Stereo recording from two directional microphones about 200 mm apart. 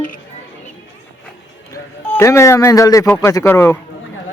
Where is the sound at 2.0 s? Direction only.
10° left (ahead or behind).